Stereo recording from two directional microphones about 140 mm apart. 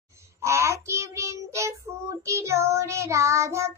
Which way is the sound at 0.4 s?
20° right (ahead or behind).